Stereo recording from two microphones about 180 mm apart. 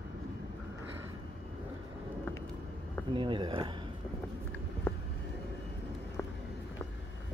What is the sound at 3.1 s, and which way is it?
Speech, 25° right (ahead or behind).